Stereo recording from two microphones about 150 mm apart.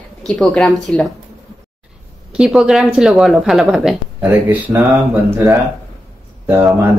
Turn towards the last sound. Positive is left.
turn(degrees=-15)  # may be behind; listen again after turning